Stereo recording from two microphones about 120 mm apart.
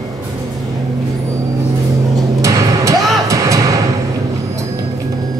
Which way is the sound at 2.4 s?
25° right (ahead or behind).